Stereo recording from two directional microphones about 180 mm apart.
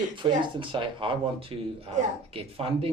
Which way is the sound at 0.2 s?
30° right (ahead or behind).